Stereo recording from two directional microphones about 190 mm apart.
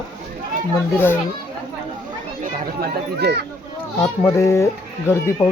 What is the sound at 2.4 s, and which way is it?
Speech, 55° right (ahead or behind).